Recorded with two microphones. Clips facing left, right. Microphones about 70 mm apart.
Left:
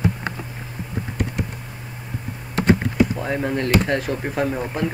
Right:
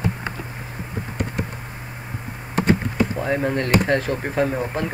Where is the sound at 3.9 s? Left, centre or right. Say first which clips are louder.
Right 2 dB; centre.